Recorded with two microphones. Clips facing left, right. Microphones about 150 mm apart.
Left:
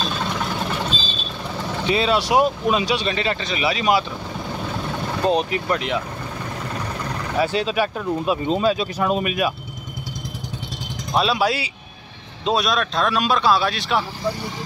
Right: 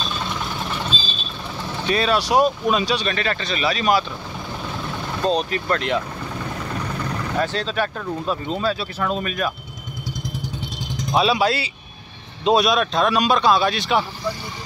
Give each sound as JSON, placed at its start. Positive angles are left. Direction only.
{"t": 1.9, "sound": "speech", "side_deg": 20}
{"t": 5.2, "sound": "speech", "side_deg": 15}
{"t": 7.3, "sound": "speech", "side_deg": 10}
{"t": 11.1, "sound": "speech", "side_deg": 0}
{"t": 11.4, "sound": "speech", "side_deg": 10}
{"t": 12.4, "sound": "speech", "side_deg": 0}